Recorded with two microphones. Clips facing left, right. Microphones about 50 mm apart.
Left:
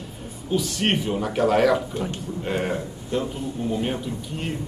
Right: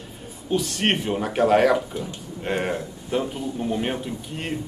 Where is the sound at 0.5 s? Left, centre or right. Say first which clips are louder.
Even; centre.